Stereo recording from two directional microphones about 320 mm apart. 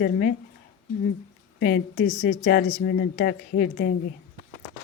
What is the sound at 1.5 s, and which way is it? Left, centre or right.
A woman's voice, left.